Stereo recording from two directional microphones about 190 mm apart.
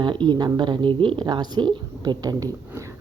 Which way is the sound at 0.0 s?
25° right (ahead or behind).